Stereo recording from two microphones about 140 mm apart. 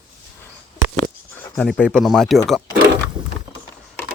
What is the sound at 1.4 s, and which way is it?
Speech, 5° left (ahead or behind).